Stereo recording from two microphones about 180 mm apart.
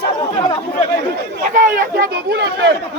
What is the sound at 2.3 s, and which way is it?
Speech, 70° right (ahead or behind).